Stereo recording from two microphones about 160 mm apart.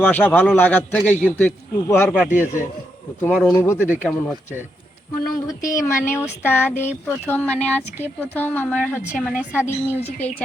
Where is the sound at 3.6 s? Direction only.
15° left (ahead or behind).